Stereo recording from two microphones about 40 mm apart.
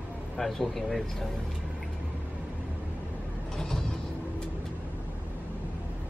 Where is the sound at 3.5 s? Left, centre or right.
Centre.